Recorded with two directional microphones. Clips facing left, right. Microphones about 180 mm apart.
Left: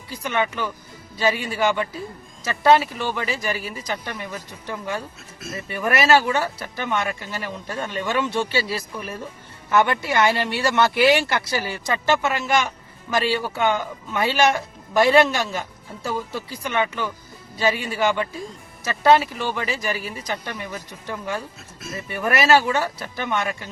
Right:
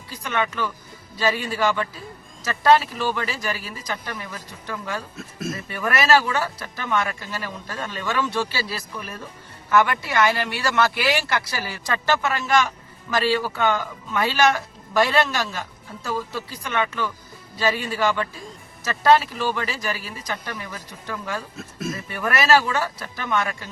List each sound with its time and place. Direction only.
0.2 s speech: 15° left (ahead or behind)